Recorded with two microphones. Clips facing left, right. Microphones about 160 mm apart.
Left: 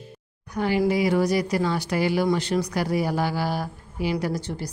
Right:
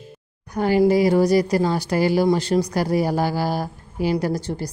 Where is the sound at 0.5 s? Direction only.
40° right (ahead or behind).